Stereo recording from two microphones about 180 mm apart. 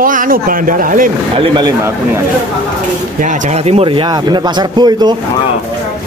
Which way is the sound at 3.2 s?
35° right (ahead or behind).